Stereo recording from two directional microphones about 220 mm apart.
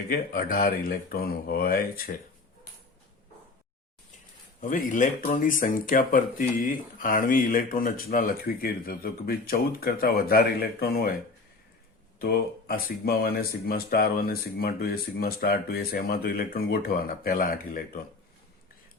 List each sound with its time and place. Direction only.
0.1 s speech: 40° left (ahead or behind)
4.6 s speech: 35° left (ahead or behind)
12.2 s speech: 45° left (ahead or behind)